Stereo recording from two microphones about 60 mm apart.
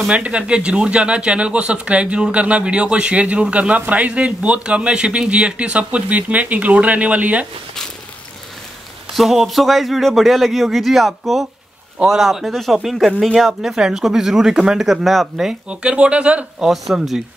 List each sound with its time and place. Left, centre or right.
0.0 s speech: centre
9.1 s speech: centre
15.7 s speech: centre
16.6 s speech: centre